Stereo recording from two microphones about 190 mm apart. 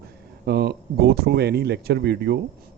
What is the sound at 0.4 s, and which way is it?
Speech, 55° right (ahead or behind).